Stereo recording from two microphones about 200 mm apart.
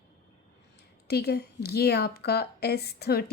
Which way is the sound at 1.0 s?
55° left (ahead or behind).